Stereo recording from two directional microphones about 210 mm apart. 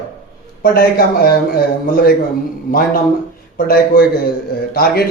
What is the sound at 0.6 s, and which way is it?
Speech, 45° left (ahead or behind).